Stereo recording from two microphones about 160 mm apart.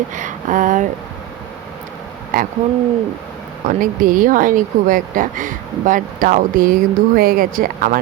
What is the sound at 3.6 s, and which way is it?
Speech, 60° right (ahead or behind).